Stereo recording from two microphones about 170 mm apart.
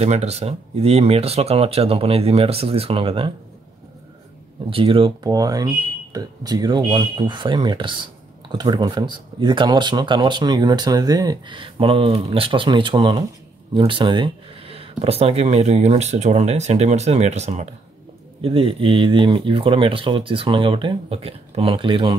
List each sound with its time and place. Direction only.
0.0 s speech: 40° right (ahead or behind)
4.6 s speech: 30° right (ahead or behind)